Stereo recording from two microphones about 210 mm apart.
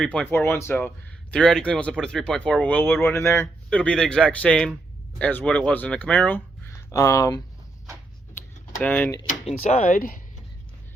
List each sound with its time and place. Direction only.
0.0 s speech: 5° left (ahead or behind)
8.4 s a sound: 10° left (ahead or behind)
9.2 s speech: 35° left (ahead or behind)